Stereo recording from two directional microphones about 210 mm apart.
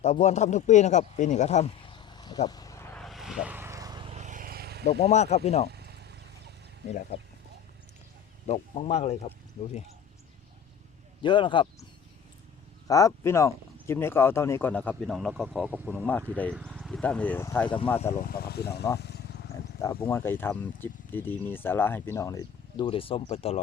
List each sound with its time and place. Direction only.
0.0 s speech: 30° left (ahead or behind)
2.5 s vehicle: 15° left (ahead or behind)
3.0 s vehicle: centre (ahead or behind); by 4.9 s 50° right (ahead or behind)
4.9 s speech: 30° left (ahead or behind)
5.6 s a sound: 50° right (ahead or behind)
6.8 s speech: 30° left (ahead or behind)
8.4 s speech: 30° left (ahead or behind)
11.2 s speech: 25° left (ahead or behind)
12.9 s speech: 15° left (ahead or behind)
18.2 s speech: 45° left (ahead or behind)
18.9 s wild animals: 50° left (ahead or behind)
19.8 s speech: 25° left (ahead or behind)
20.1 s speech: 10° left (ahead or behind); by 23.6 s 30° left (ahead or behind)